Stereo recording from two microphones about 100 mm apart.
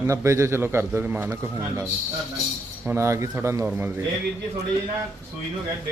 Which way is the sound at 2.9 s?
30° right (ahead or behind).